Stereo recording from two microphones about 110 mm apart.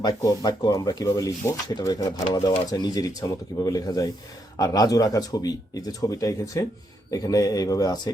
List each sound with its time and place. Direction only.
0.0 s speech: 35° left (ahead or behind)